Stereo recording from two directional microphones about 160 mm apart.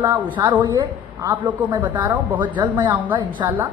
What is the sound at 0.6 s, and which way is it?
Speech, 30° right (ahead or behind).